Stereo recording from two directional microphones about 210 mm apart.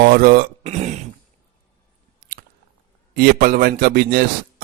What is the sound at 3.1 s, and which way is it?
Speech, 45° right (ahead or behind).